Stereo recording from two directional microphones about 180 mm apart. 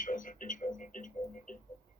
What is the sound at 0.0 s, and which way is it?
Music, 45° left (ahead or behind).